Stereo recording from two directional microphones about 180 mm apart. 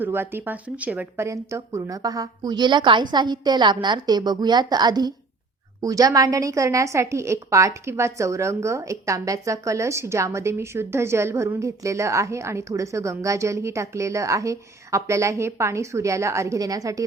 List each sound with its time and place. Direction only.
0.0 s a woman's voice: 10° right (ahead or behind)